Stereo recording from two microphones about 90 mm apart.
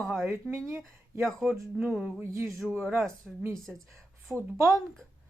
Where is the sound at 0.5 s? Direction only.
35° right (ahead or behind).